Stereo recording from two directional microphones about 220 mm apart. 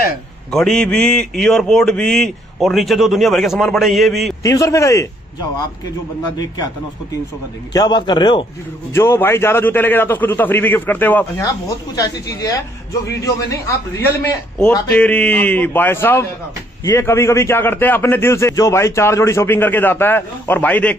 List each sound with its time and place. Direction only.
0.5 s a man's voice: centre (ahead or behind)
4.4 s a man's voice: 15° left (ahead or behind)
7.7 s a man's voice: 20° left (ahead or behind)